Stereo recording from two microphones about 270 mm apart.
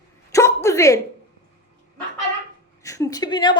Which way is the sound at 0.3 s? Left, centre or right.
Centre.